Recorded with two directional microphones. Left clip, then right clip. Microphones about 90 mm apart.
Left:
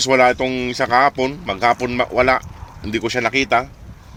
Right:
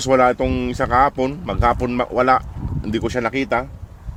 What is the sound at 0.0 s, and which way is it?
Speech, 60° right (ahead or behind).